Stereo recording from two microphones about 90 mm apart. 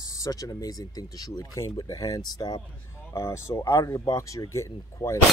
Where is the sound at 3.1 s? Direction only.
30° left (ahead or behind).